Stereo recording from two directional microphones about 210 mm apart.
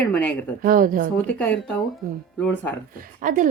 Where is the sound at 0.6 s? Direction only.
40° right (ahead or behind).